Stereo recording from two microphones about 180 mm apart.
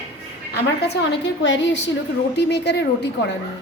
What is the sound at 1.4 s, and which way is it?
Speech, 90° left.